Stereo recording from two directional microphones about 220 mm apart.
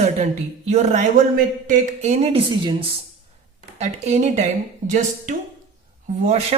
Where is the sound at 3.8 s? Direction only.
30° right (ahead or behind).